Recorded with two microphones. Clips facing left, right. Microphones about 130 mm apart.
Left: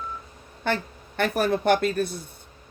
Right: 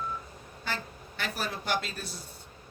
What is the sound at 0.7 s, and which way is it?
A man's voice, 60° left (ahead or behind).